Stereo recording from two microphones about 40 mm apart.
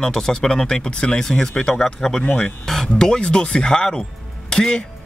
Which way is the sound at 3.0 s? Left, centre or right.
Centre.